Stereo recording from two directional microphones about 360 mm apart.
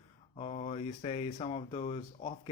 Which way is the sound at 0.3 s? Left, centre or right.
Centre.